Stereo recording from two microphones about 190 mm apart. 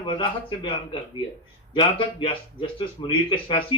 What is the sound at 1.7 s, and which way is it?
Speech, 25° left (ahead or behind).